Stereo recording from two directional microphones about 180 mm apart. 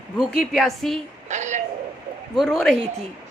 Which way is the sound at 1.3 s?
40° right (ahead or behind).